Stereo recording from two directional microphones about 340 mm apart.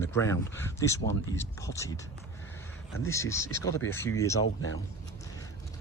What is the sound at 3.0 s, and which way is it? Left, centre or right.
Speech, centre.